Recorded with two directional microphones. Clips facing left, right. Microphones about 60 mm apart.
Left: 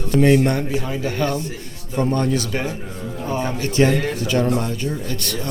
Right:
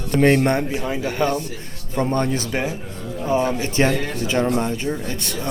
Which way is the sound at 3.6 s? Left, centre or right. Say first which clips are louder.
Left 2 dB; right.